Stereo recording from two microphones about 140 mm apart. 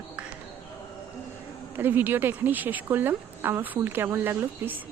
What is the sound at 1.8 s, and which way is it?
A woman's voice, 15° right (ahead or behind).